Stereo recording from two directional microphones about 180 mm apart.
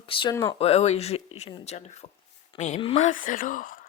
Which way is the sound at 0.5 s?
35° left (ahead or behind).